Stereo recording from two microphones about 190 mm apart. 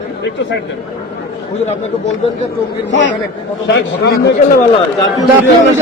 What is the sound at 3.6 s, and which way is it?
Speech, 60° left (ahead or behind).